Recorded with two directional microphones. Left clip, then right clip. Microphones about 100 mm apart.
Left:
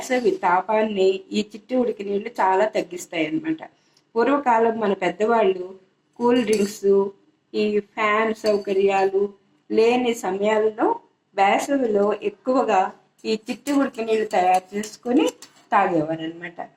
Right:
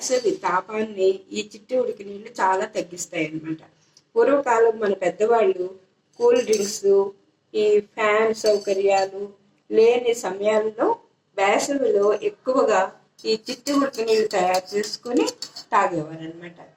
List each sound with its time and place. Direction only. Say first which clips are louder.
0.1 s speech: left 2 dB; 40° left (ahead or behind)
2.8 s speech: left 2 dB; 45° left (ahead or behind)